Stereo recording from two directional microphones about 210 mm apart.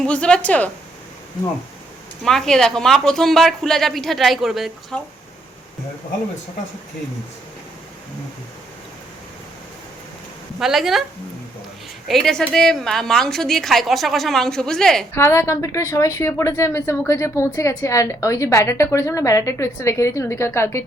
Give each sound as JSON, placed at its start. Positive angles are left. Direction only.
{"t": 0.0, "sound": "a woman's voice", "side_deg": 5}
{"t": 2.2, "sound": "a woman's voice", "side_deg": 0}
{"t": 10.6, "sound": "a woman's voice", "side_deg": 0}
{"t": 12.0, "sound": "a woman's voice", "side_deg": 0}